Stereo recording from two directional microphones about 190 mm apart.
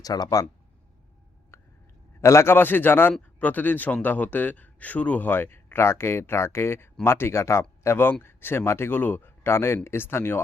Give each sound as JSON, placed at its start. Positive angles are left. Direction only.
{"t": 0.0, "sound": "speech", "side_deg": 20}
{"t": 1.5, "sound": "whispering", "side_deg": 15}
{"t": 2.2, "sound": "speech", "side_deg": 15}